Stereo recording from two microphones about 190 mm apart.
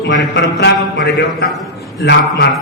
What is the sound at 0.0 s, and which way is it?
A man's voice, 70° left (ahead or behind).